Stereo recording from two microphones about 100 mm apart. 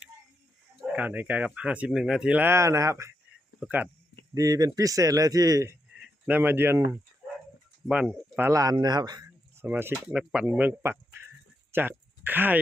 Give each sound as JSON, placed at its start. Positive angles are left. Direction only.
{"t": 0.8, "sound": "speech", "side_deg": -15}
{"t": 2.4, "sound": "speech", "side_deg": -25}
{"t": 3.6, "sound": "speech", "side_deg": -20}
{"t": 4.4, "sound": "a man's voice", "side_deg": -40}
{"t": 6.0, "sound": "speech", "side_deg": -20}
{"t": 7.9, "sound": "speech", "side_deg": -5}
{"t": 8.4, "sound": "a man's voice", "side_deg": -30}
{"t": 9.6, "sound": "speech", "side_deg": -20}
{"t": 9.9, "sound": "speech", "side_deg": -10}